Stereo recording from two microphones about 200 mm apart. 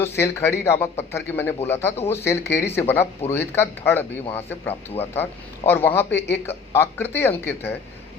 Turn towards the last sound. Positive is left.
turn(degrees=10)  # may be behind; listen again after turning